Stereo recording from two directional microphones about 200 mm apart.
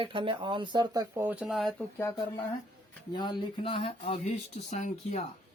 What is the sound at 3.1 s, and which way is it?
Speech, 20° left (ahead or behind).